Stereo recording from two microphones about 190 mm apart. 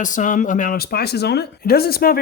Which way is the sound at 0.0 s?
45° left (ahead or behind).